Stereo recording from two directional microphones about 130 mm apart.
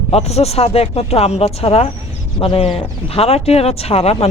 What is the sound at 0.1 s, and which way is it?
Speech, 55° left (ahead or behind).